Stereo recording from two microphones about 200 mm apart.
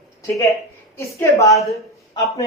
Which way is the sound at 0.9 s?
15° left (ahead or behind).